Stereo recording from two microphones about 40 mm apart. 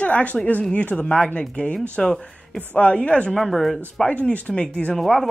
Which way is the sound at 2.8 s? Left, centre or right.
Left.